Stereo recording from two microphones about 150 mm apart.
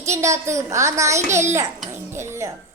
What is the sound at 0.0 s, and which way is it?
A woman's voice, 20° right (ahead or behind).